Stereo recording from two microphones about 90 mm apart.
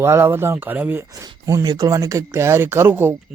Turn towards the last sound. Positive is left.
turn(degrees=-25)  # may be behind; listen again after turning